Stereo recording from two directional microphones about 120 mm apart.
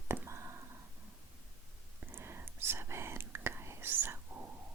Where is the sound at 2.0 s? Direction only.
20° right (ahead or behind).